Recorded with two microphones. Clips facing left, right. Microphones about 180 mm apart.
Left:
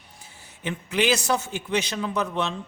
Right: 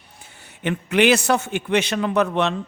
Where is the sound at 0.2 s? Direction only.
65° right (ahead or behind).